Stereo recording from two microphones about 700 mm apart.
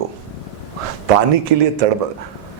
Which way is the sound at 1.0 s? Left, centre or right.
Right.